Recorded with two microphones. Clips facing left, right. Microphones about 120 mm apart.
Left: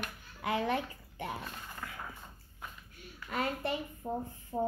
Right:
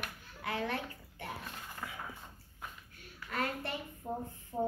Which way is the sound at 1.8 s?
5° right (ahead or behind).